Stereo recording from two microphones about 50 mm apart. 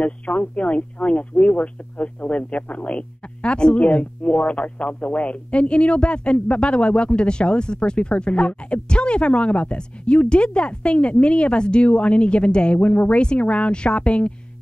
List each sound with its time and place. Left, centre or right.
0.0 s speech: left